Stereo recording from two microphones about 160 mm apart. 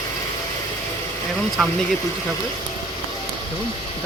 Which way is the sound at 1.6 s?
Centre (ahead or behind).